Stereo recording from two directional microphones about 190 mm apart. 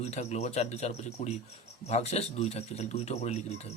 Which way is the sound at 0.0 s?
35° left (ahead or behind).